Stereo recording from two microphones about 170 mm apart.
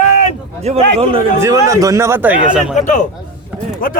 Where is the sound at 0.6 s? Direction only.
40° right (ahead or behind).